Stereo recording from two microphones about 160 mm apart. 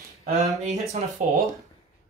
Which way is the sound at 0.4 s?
45° right (ahead or behind).